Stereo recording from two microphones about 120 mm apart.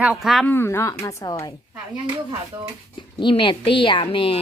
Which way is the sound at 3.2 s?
45° left (ahead or behind).